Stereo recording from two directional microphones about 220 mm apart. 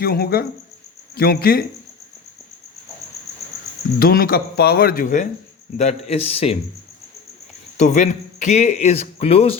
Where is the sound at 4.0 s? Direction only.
40° left (ahead or behind); by 6.5 s 25° left (ahead or behind).